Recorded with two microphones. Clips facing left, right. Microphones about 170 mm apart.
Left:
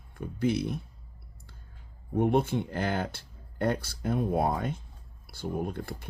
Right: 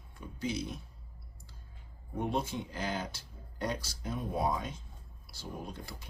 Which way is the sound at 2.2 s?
55° left (ahead or behind).